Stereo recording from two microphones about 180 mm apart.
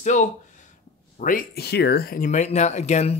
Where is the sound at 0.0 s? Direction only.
45° left (ahead or behind).